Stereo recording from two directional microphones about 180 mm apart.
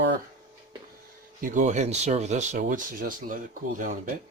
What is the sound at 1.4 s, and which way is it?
Speech, 45° right (ahead or behind).